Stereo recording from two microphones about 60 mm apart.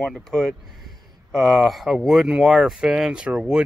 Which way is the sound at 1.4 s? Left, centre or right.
Centre.